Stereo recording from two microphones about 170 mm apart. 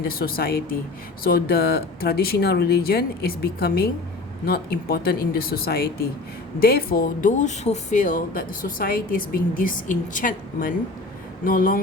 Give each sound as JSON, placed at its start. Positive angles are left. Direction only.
{"t": 0.0, "sound": "speech", "side_deg": 60}